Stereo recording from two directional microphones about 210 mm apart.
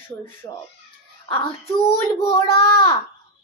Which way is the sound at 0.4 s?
20° left (ahead or behind).